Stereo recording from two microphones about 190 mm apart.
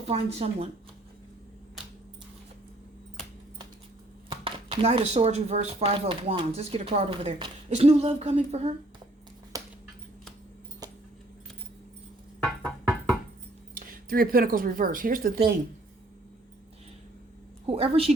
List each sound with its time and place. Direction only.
0.1 s speech: 35° right (ahead or behind)
4.3 s speech: 25° right (ahead or behind)
9.5 s a sound: 15° right (ahead or behind)
12.4 s music: 5° left (ahead or behind)
13.7 s speech: 50° right (ahead or behind)
17.7 s speech: 30° right (ahead or behind)